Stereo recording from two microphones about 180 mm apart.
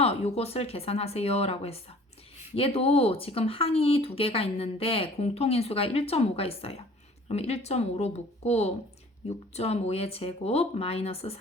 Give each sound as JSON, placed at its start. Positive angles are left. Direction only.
{"t": 0.0, "sound": "speech", "side_deg": 35}